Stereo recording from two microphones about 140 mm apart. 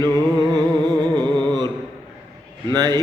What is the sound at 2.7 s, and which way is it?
Mantra, 30° right (ahead or behind).